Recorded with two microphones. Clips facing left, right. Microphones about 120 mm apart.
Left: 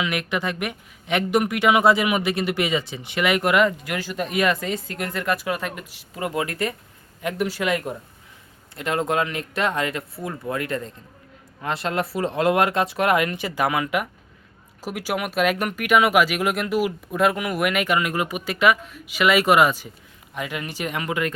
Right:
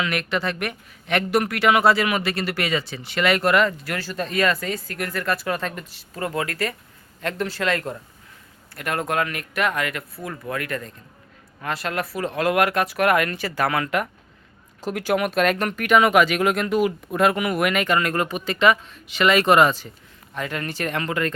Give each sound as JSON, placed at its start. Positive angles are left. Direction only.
{"t": 0.0, "sound": "speech", "side_deg": 15}